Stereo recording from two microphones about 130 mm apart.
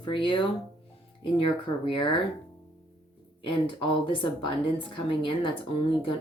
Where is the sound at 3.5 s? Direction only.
40° left (ahead or behind).